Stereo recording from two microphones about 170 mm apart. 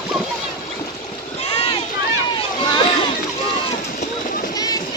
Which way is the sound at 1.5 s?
35° left (ahead or behind).